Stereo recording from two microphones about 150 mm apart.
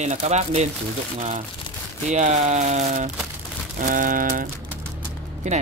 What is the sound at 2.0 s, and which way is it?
Speech, 50° right (ahead or behind).